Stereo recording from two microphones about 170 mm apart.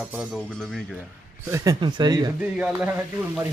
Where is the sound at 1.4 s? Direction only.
20° right (ahead or behind).